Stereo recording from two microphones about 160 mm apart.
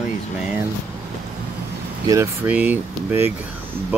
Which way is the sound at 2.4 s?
10° right (ahead or behind).